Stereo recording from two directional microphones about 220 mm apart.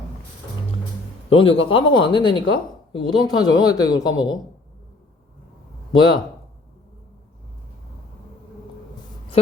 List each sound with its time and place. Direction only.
1.3 s a woman's voice: 25° left (ahead or behind)
5.9 s a woman's voice: 20° left (ahead or behind)